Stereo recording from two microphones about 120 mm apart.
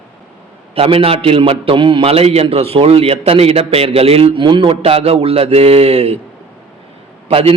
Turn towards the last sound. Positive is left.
turn(degrees=-55)  # may be behind; listen again after turning